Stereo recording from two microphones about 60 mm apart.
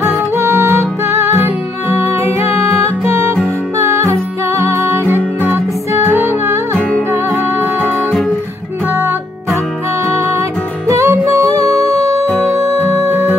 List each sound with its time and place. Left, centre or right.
0.0 s music: right
8.9 s music: right